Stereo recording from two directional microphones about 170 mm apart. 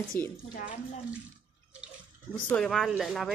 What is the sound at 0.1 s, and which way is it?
Speech, 10° left (ahead or behind).